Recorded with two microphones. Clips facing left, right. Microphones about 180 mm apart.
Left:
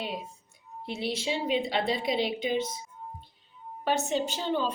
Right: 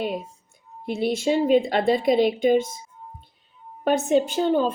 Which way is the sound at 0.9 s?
50° right (ahead or behind).